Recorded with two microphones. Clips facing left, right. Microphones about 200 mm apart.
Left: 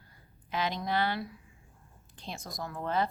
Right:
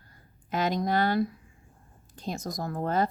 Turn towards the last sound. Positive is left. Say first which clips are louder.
# right 4 dB
turn(degrees=-45)  # may be behind; listen again after turning